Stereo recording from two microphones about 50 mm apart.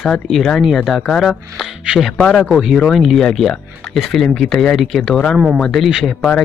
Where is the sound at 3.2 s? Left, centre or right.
Centre.